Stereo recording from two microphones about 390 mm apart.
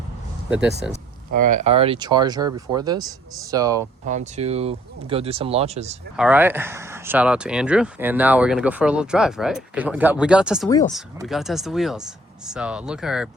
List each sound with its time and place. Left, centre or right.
0.8 s speech: centre
1.3 s speech: centre
6.1 s speech: centre